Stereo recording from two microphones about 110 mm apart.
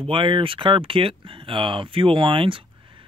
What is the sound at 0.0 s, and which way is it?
Speech, 50° right (ahead or behind).